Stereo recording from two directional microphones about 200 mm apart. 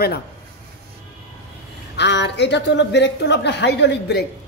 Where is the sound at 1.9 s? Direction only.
60° left (ahead or behind).